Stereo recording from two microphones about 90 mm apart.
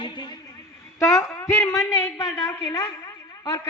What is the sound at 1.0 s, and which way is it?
Speech, 35° left (ahead or behind).